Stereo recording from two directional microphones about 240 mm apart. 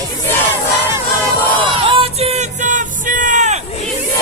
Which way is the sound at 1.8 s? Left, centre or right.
Right.